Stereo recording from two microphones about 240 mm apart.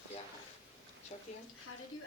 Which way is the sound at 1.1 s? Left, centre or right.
Left.